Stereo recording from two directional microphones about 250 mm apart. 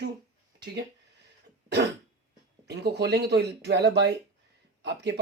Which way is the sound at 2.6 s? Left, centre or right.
Right.